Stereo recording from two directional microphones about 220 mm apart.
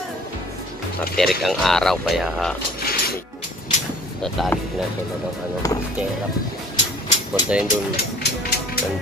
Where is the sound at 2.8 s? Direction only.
45° left (ahead or behind).